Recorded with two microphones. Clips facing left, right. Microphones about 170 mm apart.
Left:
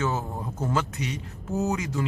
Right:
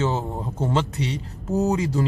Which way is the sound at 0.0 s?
25° right (ahead or behind).